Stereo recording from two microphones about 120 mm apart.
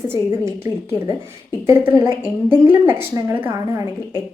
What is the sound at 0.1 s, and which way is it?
A woman's voice, 20° right (ahead or behind).